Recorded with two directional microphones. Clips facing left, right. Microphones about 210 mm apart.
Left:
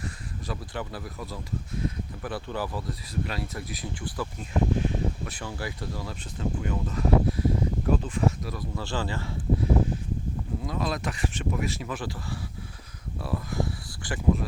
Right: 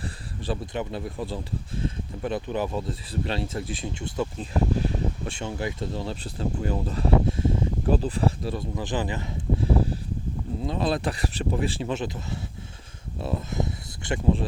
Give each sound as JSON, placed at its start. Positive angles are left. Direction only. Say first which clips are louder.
{"t": 0.0, "sound": "speech", "louder": "right 3 dB", "side_deg": -30}
{"t": 8.7, "sound": "speech", "louder": "even", "side_deg": -15}